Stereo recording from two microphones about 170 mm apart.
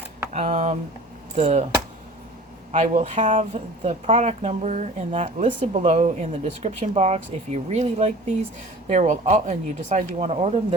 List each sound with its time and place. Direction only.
0.4 s speech: 45° right (ahead or behind)
2.7 s speech: 40° right (ahead or behind)